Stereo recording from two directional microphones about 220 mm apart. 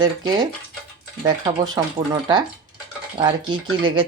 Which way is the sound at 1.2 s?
15° right (ahead or behind).